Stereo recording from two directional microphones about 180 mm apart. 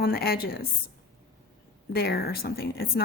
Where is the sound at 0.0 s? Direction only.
60° left (ahead or behind).